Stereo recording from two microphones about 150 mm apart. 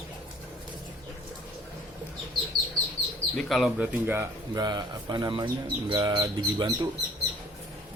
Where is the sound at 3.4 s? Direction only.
Centre (ahead or behind).